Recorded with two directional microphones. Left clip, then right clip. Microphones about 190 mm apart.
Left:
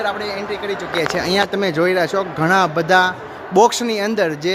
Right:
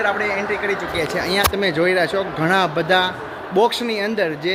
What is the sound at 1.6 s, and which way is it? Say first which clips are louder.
Speech: left 1 dB; 25° left (ahead or behind).